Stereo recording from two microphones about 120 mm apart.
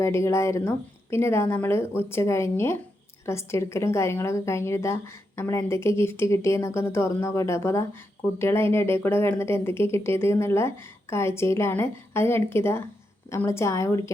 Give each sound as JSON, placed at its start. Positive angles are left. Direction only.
{"t": 0.0, "sound": "speech", "side_deg": 25}